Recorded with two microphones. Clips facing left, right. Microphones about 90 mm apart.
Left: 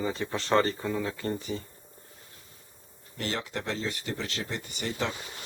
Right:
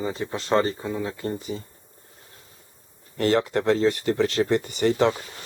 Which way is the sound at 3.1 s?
50° right (ahead or behind).